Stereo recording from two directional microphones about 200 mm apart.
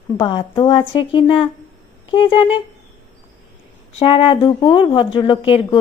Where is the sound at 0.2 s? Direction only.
25° left (ahead or behind).